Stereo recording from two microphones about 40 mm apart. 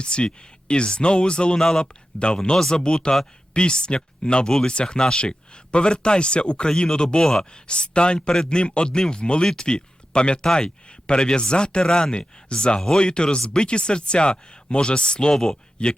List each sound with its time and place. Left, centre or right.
0.0 s speech: left
7.7 s speech: left